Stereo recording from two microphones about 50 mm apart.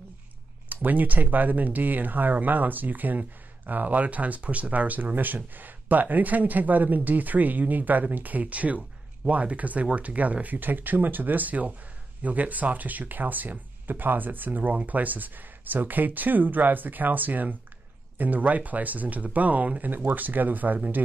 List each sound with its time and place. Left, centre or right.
0.7 s speech: right